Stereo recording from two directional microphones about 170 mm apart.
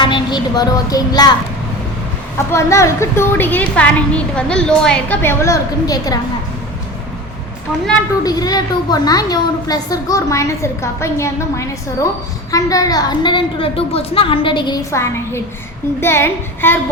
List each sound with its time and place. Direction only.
0.0 s a child's voice: 25° left (ahead or behind)
2.5 s a woman's voice: 15° left (ahead or behind)
8.2 s a child's voice: 20° left (ahead or behind)